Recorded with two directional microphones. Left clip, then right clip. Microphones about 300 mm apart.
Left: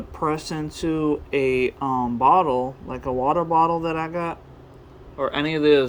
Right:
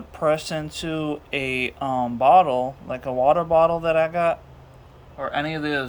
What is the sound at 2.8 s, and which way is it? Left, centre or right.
Speech, centre.